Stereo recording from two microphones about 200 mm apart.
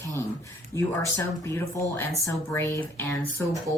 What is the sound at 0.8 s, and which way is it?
Speech, 15° left (ahead or behind).